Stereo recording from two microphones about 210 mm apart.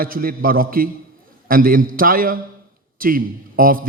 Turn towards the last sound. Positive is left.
turn(degrees=-40)  # may be behind; listen again after turning